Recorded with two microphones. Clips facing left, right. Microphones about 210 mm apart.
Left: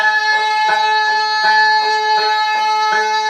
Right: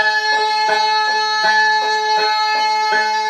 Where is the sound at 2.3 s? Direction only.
50° right (ahead or behind).